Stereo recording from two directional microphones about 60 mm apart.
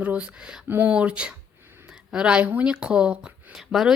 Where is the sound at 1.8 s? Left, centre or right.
Centre.